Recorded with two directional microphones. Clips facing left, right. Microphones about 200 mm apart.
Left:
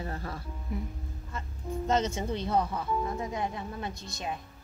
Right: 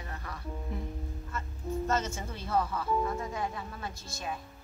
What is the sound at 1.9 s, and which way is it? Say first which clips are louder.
Speech: left 9 dB; 15° left (ahead or behind).